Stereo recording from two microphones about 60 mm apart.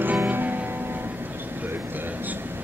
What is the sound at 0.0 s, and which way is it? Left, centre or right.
Music, right.